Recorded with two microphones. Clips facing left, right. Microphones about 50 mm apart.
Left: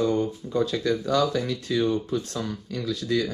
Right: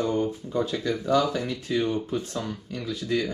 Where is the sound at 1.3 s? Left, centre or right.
Right.